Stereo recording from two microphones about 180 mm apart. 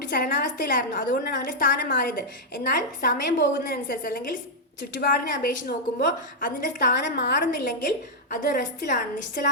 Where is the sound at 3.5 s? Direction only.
50° left (ahead or behind).